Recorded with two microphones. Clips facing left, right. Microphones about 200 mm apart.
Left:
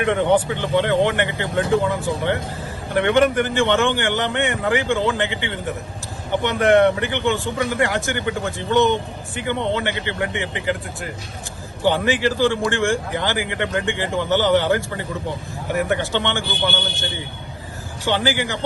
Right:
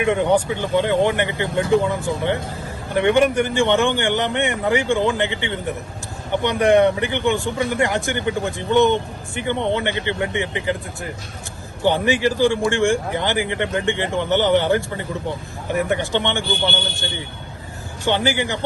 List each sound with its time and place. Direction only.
0.0 s speech: 15° right (ahead or behind)
18.0 s speech: 15° right (ahead or behind)